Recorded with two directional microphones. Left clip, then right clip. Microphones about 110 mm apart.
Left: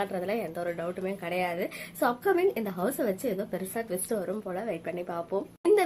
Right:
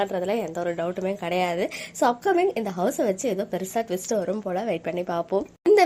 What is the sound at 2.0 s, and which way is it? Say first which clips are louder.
A woman's voice: right 5 dB; 20° right (ahead or behind).